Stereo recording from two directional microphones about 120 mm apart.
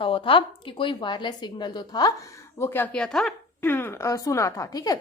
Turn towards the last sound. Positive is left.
turn(degrees=30)  # may be behind; listen again after turning